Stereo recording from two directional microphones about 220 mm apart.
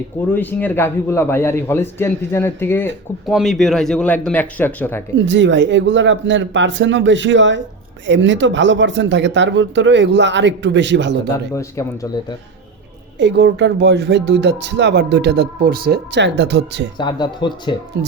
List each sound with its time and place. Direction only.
0.3 s a man's voice: 10° left (ahead or behind)
5.1 s speech: 55° right (ahead or behind)
13.1 s speech: 50° right (ahead or behind)
17.0 s speech: 20° left (ahead or behind)